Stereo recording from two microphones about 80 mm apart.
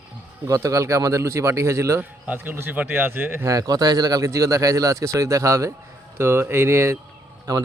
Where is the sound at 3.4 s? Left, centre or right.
Right.